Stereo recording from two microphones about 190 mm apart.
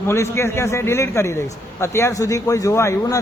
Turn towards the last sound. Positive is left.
turn(degrees=15)  # may be behind; listen again after turning